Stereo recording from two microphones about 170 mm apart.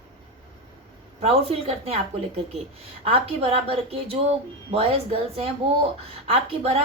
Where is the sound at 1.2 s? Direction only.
35° right (ahead or behind).